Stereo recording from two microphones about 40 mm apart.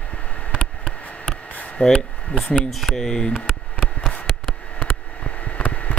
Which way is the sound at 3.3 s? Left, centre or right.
Centre.